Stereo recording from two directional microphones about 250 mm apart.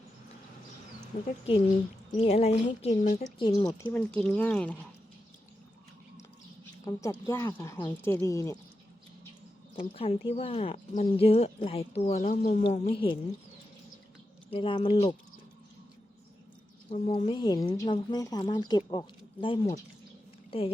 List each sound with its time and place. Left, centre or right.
2.1 s a woman's voice: left; by 4.8 s centre
6.8 s a woman's voice: centre
9.9 s speech: left
14.5 s speech: left
16.9 s a woman's voice: left